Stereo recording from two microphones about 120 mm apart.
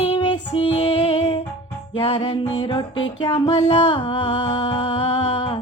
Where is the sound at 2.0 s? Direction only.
50° left (ahead or behind).